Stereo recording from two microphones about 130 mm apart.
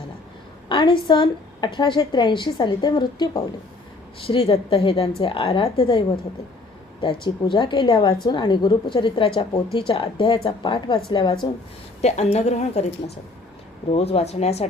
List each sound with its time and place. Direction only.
0.7 s a woman's voice: 35° left (ahead or behind)
7.0 s a woman's voice: 40° left (ahead or behind)
12.0 s a woman's voice: 60° left (ahead or behind)
13.9 s a woman's voice: 50° left (ahead or behind)